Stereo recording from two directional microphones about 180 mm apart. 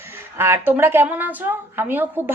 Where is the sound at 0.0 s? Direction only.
15° right (ahead or behind).